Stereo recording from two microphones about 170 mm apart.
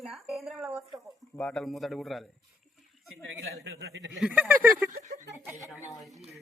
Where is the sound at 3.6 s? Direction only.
85° right.